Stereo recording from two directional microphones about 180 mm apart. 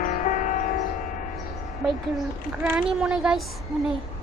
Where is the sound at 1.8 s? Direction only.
Centre (ahead or behind).